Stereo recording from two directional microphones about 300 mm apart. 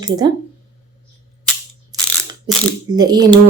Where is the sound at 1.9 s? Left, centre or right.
Centre.